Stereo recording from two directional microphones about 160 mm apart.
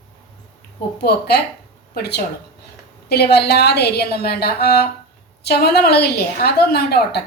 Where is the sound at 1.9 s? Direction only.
90° left.